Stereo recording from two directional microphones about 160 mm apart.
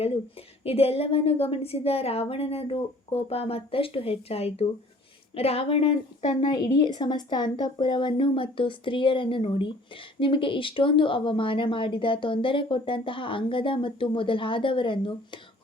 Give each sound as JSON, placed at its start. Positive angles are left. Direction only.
{"t": 0.0, "sound": "a woman's voice", "side_deg": 35}
{"t": 6.7, "sound": "a woman's voice", "side_deg": 25}